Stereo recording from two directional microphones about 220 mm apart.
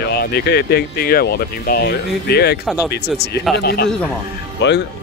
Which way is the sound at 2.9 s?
50° left (ahead or behind).